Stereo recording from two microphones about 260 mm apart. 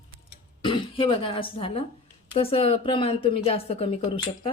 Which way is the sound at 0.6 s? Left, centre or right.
Centre.